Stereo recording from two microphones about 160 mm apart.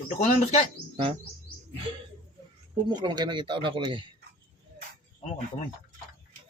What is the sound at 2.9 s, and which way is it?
Speech, 25° right (ahead or behind).